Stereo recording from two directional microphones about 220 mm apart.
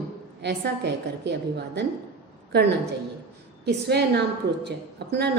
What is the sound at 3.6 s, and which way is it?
A woman's voice, 50° right (ahead or behind).